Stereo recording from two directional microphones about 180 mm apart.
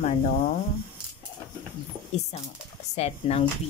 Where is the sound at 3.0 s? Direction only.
35° left (ahead or behind).